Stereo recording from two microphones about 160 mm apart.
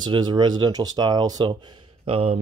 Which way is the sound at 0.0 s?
30° right (ahead or behind).